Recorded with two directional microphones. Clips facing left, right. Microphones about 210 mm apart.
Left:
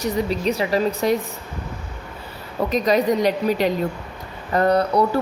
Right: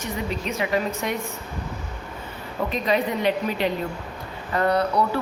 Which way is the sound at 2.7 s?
40° left (ahead or behind).